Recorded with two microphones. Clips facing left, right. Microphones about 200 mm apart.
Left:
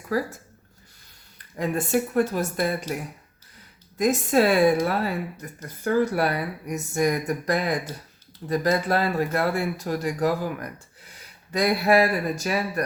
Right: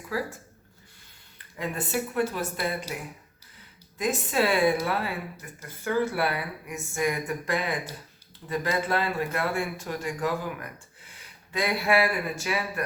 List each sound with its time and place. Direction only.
0.1 s speech: 40° left (ahead or behind)
1.5 s speech: 40° left (ahead or behind)
3.9 s speech: 40° left (ahead or behind)